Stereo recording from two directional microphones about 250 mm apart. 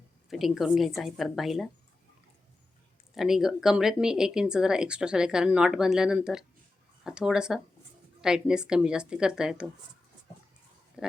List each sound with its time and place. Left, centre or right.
0.3 s speech: centre
3.2 s speech: centre
11.0 s a sound: centre